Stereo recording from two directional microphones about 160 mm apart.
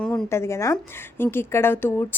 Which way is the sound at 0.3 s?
15° left (ahead or behind).